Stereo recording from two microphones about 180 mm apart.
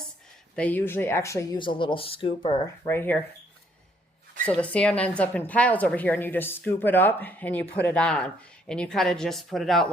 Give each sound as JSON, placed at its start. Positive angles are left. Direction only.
{"t": 0.5, "sound": "speech", "side_deg": 10}
{"t": 2.8, "sound": "a woman's voice", "side_deg": 10}
{"t": 4.4, "sound": "a woman's voice", "side_deg": 5}